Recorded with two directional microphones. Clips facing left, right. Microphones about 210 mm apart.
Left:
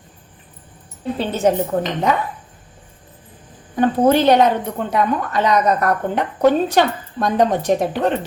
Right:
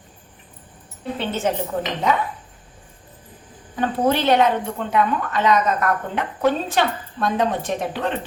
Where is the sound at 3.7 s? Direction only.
45° left (ahead or behind).